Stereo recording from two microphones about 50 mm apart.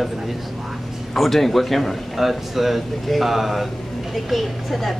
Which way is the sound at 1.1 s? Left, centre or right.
Centre.